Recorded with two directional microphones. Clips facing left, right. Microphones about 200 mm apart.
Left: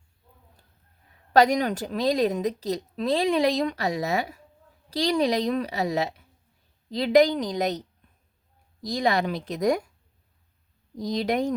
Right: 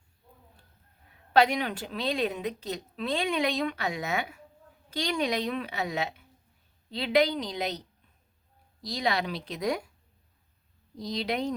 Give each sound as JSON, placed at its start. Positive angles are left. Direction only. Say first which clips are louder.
{"t": 1.3, "sound": "a woman's voice", "louder": "left 4 dB", "side_deg": 40}
{"t": 8.8, "sound": "speech", "louder": "left 5 dB", "side_deg": 45}
{"t": 10.9, "sound": "speech", "louder": "left 6 dB", "side_deg": 45}